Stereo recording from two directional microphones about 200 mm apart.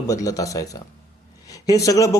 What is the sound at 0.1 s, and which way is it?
A man's voice, 15° left (ahead or behind).